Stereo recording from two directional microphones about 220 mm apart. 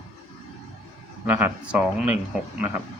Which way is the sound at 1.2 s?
5° right (ahead or behind).